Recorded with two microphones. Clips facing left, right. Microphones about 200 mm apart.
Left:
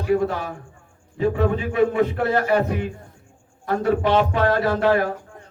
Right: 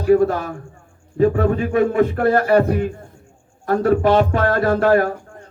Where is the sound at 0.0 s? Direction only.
45° right (ahead or behind).